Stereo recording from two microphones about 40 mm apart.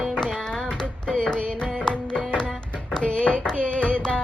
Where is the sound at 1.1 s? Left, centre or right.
Left.